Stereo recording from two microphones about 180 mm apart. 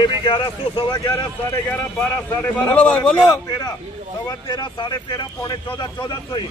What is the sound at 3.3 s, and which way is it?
Speech, 20° left (ahead or behind).